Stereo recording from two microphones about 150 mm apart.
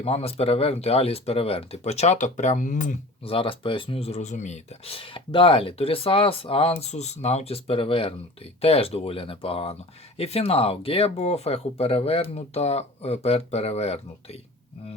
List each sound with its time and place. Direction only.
0.0 s speech: 40° left (ahead or behind); by 3.0 s 60° left (ahead or behind)
3.2 s speech: 35° left (ahead or behind)